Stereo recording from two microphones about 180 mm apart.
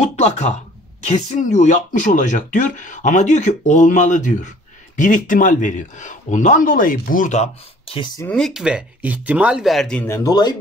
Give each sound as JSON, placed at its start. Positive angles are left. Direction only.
{"t": 0.0, "sound": "speech", "side_deg": 40}
{"t": 8.2, "sound": "speech", "side_deg": 5}